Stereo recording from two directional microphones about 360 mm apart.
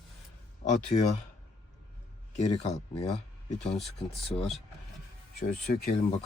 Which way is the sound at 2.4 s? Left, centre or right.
Centre.